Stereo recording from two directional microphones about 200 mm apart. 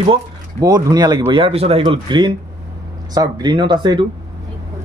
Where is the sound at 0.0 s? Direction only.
20° right (ahead or behind).